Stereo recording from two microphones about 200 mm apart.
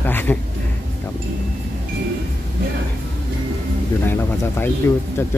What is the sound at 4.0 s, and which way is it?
Speech, 10° left (ahead or behind).